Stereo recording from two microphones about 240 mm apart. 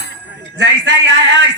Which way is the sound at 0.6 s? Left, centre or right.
Right.